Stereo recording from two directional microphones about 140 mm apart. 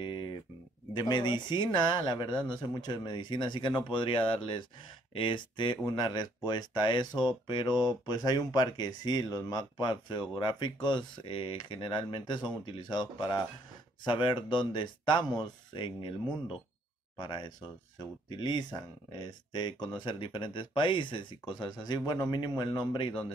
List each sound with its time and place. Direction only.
0.0 s a sound: 35° left (ahead or behind)
0.9 s speech: 30° left (ahead or behind)
17.2 s speech: 35° left (ahead or behind)